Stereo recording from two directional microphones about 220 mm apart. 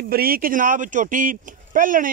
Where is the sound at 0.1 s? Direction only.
40° right (ahead or behind).